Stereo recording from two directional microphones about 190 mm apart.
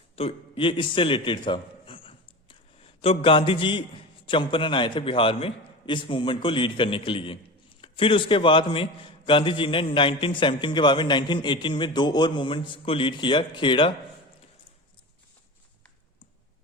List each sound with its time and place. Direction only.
0.2 s a man's voice: 30° left (ahead or behind)